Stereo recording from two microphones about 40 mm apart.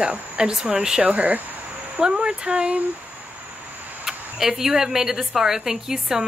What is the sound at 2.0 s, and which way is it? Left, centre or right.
Speech, right.